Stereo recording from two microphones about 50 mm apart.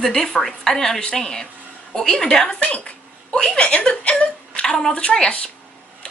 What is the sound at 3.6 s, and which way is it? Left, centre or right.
A woman's voice, centre.